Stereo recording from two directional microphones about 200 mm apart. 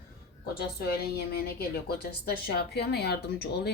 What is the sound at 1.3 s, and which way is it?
Speech, 50° left (ahead or behind).